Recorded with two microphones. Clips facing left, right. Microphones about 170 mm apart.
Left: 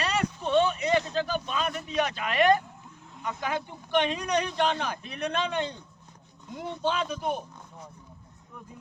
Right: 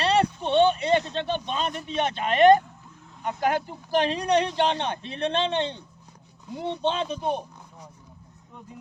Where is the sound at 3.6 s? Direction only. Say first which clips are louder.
Right 2 dB; 35° right (ahead or behind).